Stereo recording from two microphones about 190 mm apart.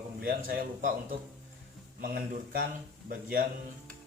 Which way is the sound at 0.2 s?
45° right (ahead or behind).